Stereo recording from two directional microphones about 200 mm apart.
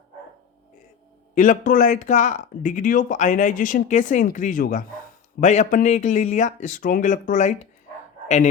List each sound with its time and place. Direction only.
1.4 s speech: 40° left (ahead or behind)